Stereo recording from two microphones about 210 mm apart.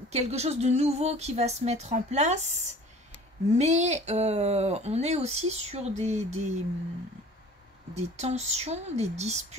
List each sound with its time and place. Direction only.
0.1 s speech: 30° right (ahead or behind)
3.5 s speech: 30° right (ahead or behind)
7.9 s speech: 30° right (ahead or behind)